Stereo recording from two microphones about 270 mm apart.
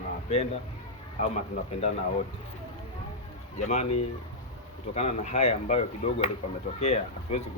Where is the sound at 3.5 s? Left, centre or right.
Left.